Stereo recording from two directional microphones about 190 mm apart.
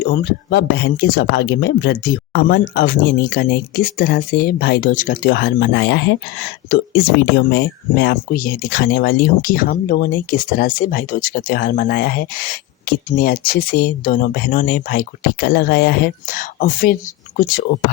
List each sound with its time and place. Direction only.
0.0 s speech: 55° left (ahead or behind)